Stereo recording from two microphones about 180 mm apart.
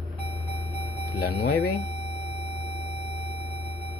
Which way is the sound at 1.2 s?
60° left (ahead or behind).